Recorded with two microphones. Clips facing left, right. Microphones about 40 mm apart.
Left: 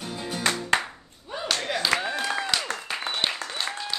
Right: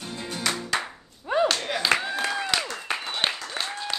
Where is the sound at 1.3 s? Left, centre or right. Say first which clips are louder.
Right 12 dB; right.